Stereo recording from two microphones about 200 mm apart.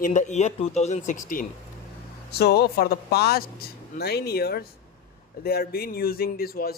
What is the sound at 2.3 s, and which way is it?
Speech, 55° left (ahead or behind).